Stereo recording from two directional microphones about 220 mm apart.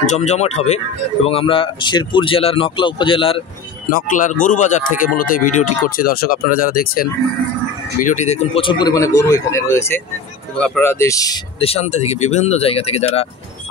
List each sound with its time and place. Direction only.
0.0 s a man's voice: 30° left (ahead or behind)
3.9 s speech: 35° left (ahead or behind); by 11.3 s 15° left (ahead or behind)
11.6 s a man's voice: 30° left (ahead or behind)